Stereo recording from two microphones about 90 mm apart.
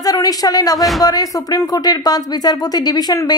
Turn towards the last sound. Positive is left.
turn(degrees=50)  # may be behind; listen again after turning